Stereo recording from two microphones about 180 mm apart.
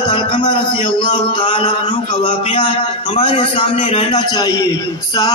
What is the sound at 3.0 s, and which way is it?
Speech, 40° left (ahead or behind).